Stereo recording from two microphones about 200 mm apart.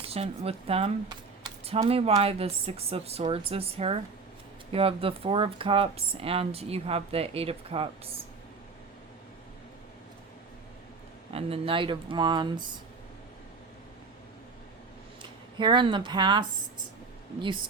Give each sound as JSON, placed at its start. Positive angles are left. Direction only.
{"t": 0.0, "sound": "speech", "side_deg": -30}
{"t": 11.3, "sound": "speech", "side_deg": -30}
{"t": 15.2, "sound": "speech", "side_deg": -20}